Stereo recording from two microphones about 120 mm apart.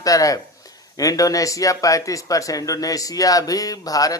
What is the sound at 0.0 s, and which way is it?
Speech, 30° left (ahead or behind).